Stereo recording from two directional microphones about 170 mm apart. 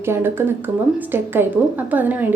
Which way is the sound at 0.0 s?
15° right (ahead or behind).